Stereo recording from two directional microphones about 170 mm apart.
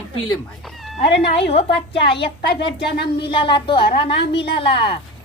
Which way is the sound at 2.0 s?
75° left (ahead or behind).